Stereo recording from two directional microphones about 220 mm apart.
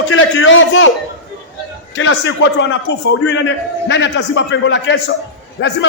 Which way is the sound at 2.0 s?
60° left (ahead or behind).